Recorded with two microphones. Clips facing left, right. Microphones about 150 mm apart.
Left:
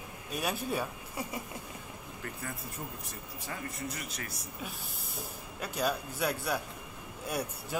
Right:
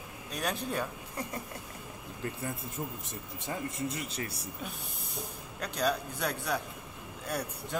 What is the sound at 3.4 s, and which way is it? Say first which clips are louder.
A man's voice: right 4 dB; 25° right (ahead or behind).